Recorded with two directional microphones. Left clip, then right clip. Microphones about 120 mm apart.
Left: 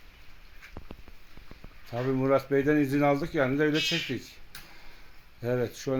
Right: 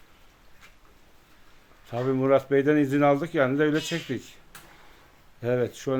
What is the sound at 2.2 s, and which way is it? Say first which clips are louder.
Speech: right 4 dB; centre (ahead or behind).